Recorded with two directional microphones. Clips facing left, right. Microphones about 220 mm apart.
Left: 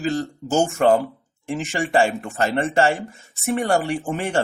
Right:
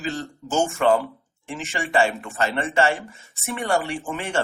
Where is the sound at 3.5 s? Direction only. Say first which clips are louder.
Left 4 dB; 45° left (ahead or behind).